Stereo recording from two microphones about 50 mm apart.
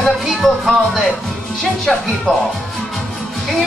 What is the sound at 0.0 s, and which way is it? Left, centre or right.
Music, centre.